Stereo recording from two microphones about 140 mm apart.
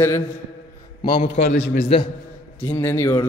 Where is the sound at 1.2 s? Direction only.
50° left (ahead or behind).